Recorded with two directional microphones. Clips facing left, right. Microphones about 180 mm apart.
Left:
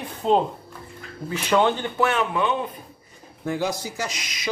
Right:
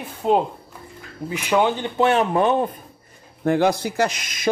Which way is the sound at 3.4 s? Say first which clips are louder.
Right 7 dB; 60° right (ahead or behind).